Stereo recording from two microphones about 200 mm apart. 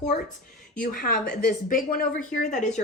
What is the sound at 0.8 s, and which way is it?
A woman's voice, 45° left (ahead or behind).